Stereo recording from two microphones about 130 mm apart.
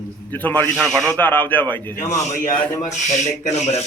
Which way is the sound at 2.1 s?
65° left (ahead or behind).